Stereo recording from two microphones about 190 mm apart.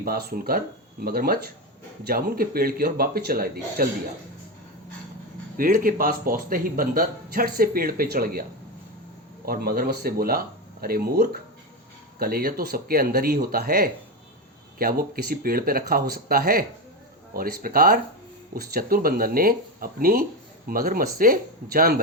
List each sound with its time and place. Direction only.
0.0 s speech: 55° right (ahead or behind)
5.5 s speech: 45° right (ahead or behind)
9.5 s speech: 50° right (ahead or behind)